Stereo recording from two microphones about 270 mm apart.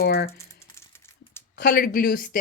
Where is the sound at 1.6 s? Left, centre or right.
Left.